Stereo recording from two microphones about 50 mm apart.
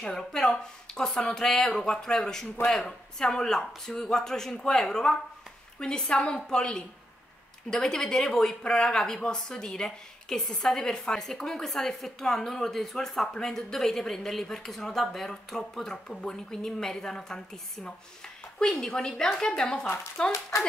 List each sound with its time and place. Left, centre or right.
0.1 s speech: centre
18.6 s speech: centre